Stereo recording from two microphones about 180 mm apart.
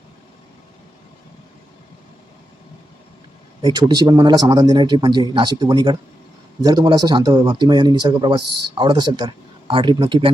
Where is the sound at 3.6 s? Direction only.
25° right (ahead or behind).